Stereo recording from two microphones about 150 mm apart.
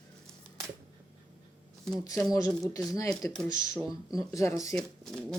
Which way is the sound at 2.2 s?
25° left (ahead or behind).